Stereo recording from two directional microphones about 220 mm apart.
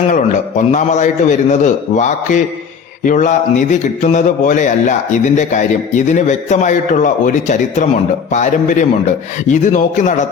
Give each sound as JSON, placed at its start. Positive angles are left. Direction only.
{"t": 0.1, "sound": "speech", "side_deg": 35}